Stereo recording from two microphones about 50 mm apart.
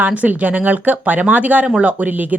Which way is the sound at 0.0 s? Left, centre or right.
Right.